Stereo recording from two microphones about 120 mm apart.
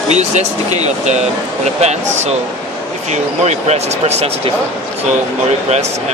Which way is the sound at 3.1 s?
70° right (ahead or behind).